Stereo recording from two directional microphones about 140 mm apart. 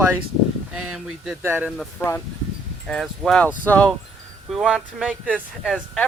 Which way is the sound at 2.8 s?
Centre (ahead or behind).